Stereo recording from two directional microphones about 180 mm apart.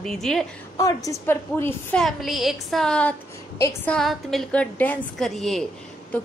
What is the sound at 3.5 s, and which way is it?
Speech, 15° left (ahead or behind).